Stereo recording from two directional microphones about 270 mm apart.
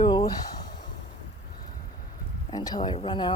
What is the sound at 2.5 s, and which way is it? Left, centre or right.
Speech, centre.